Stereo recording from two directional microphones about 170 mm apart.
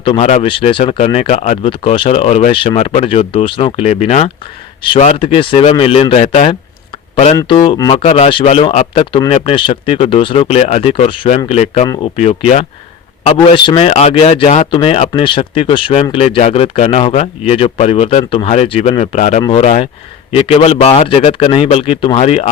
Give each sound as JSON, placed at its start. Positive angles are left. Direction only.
{"t": 0.0, "sound": "speech", "side_deg": 35}
{"t": 8.0, "sound": "speech", "side_deg": 40}